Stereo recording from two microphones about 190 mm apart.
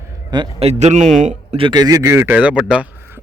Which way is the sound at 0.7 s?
35° right (ahead or behind).